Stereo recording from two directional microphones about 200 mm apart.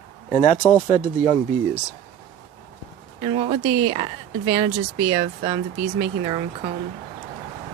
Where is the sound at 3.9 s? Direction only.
25° right (ahead or behind).